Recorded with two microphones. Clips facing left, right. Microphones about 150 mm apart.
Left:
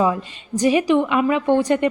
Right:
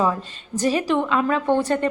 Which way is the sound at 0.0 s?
10° left (ahead or behind).